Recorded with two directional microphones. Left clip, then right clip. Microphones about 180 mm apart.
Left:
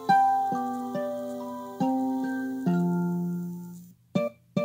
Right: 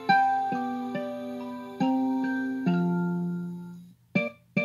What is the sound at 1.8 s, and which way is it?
Music, 35° left (ahead or behind).